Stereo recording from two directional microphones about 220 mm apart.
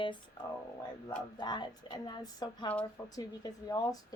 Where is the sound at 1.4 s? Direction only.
20° left (ahead or behind).